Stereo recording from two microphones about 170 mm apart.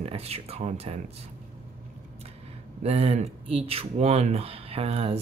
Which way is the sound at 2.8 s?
40° right (ahead or behind).